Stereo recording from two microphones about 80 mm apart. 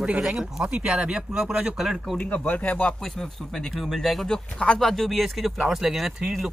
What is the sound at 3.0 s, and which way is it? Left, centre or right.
Speech, centre.